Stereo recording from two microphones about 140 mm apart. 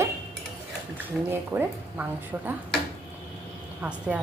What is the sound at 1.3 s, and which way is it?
Speech, 15° right (ahead or behind).